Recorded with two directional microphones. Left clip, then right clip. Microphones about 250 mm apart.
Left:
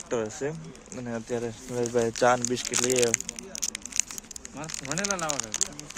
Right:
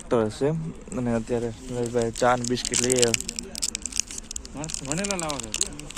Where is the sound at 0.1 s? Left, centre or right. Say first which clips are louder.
Right 7 dB; centre.